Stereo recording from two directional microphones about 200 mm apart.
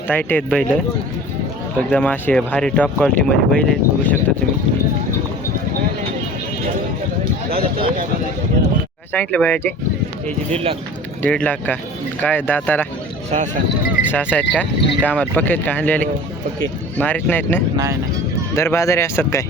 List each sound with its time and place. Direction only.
0.1 s speech: 10° left (ahead or behind)
1.9 s speech: 5° left (ahead or behind)
9.1 s speech: 5° left (ahead or behind)
10.5 s speech: 30° right (ahead or behind)
11.2 s speech: 5° left (ahead or behind)
14.1 s speech: 10° left (ahead or behind)